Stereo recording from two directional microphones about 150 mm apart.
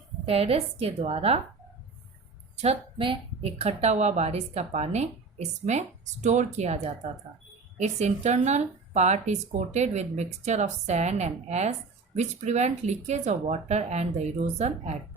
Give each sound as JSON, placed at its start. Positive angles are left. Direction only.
{"t": 0.3, "sound": "speech", "side_deg": -40}
{"t": 2.6, "sound": "speech", "side_deg": -40}